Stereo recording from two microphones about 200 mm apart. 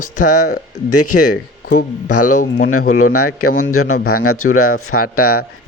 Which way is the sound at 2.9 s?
90° left.